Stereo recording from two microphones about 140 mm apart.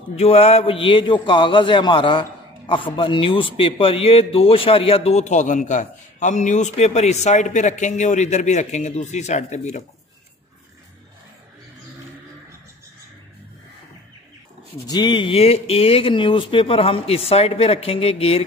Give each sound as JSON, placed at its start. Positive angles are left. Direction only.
{"t": 0.1, "sound": "a man's voice", "side_deg": 50}
{"t": 14.9, "sound": "a man's voice", "side_deg": 30}